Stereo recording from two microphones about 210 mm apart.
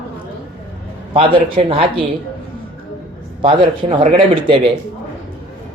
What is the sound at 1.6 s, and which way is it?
Speech, 30° right (ahead or behind).